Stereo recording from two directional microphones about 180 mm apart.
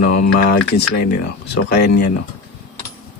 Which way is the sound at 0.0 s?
55° left (ahead or behind).